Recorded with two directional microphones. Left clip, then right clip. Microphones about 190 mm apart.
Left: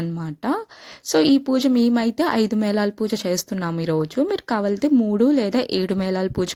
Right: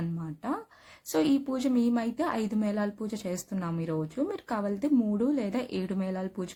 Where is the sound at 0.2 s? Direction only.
45° left (ahead or behind).